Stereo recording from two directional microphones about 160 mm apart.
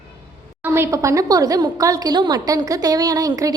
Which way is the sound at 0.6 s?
15° right (ahead or behind).